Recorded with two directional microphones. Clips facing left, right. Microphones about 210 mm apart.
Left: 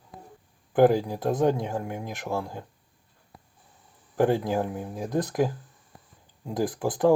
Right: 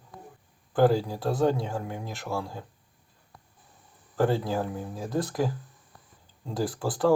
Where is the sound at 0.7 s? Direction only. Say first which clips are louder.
Left 3 dB; 15° left (ahead or behind).